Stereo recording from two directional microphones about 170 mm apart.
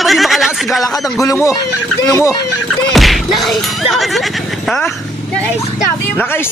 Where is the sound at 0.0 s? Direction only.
Centre (ahead or behind).